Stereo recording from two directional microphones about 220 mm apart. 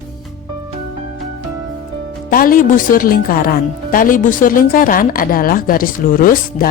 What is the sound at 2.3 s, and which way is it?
Speech, 40° left (ahead or behind).